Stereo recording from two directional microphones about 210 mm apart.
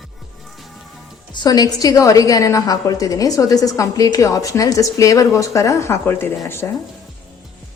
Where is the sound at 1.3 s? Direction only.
20° left (ahead or behind).